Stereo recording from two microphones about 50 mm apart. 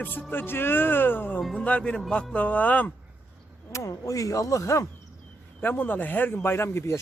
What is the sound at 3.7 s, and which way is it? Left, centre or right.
Speech, left.